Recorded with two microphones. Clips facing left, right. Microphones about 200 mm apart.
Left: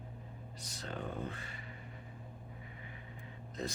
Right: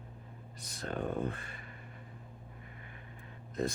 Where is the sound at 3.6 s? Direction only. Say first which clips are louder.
Right 6 dB; 55° right (ahead or behind).